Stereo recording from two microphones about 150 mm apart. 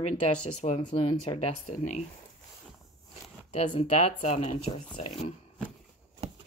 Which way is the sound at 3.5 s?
45° left (ahead or behind).